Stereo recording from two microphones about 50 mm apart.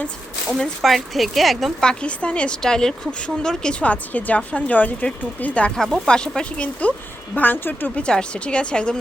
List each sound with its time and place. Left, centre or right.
0.8 s speech: centre
1.8 s a woman's voice: centre
3.8 s a woman's voice: left
7.3 s speech: left
7.9 s a woman's voice: centre